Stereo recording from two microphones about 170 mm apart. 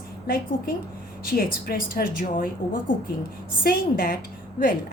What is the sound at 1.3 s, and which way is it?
A woman's voice, 60° left (ahead or behind).